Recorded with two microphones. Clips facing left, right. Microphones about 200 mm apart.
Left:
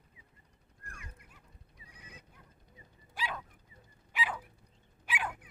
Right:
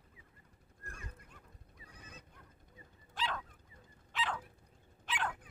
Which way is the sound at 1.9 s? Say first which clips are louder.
Even; 10° left (ahead or behind).